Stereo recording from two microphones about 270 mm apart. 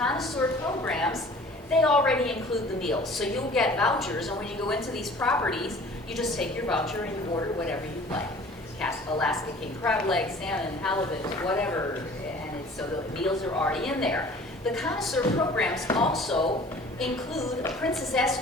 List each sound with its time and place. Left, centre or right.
0.0 s a sound: centre
1.8 s a woman's voice: centre
13.2 s a woman's voice: centre